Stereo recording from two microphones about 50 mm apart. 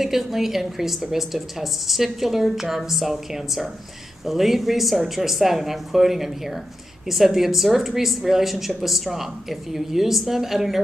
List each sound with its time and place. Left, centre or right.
0.0 s speech: centre